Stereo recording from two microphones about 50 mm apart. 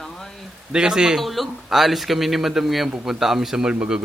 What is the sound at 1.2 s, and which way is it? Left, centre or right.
A man's voice, centre.